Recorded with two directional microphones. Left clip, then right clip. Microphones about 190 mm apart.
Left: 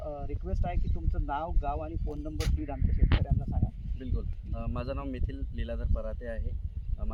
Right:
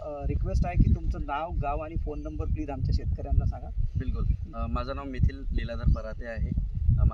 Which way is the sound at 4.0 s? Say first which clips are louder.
Right 3 dB; 5° left (ahead or behind).